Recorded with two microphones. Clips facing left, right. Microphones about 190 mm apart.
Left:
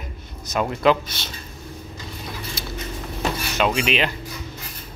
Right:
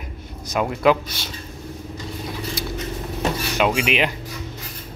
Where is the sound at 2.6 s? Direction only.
15° right (ahead or behind).